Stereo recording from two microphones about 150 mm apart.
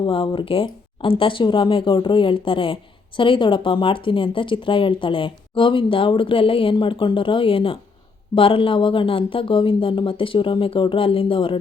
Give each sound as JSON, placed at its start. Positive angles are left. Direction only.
{"t": 0.0, "sound": "speech", "side_deg": 35}